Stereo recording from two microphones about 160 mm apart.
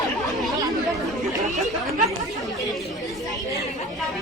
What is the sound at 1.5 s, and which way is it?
Speech, centre (ahead or behind).